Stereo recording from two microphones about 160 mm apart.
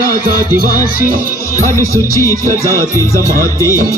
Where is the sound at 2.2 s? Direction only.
20° left (ahead or behind).